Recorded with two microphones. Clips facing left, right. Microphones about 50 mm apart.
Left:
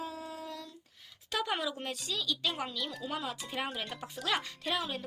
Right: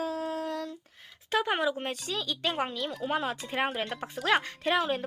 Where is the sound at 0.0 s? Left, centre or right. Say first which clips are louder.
Right 9 dB; right.